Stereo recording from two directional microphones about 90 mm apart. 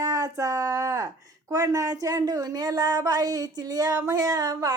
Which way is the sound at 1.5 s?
40° right (ahead or behind).